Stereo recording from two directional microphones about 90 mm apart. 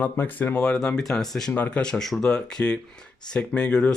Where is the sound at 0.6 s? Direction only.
5° left (ahead or behind).